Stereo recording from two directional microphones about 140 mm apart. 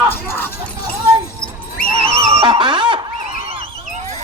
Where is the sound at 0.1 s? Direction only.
15° left (ahead or behind).